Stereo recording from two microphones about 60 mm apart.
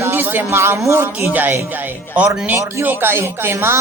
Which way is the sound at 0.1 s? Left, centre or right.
Right.